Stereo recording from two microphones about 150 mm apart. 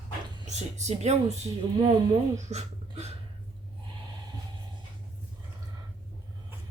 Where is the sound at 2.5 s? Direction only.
45° right (ahead or behind).